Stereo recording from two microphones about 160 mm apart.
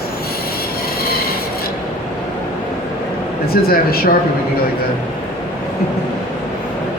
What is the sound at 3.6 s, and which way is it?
Speech, 70° left (ahead or behind).